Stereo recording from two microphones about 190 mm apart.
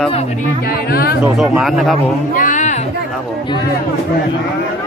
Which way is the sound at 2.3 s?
45° left (ahead or behind).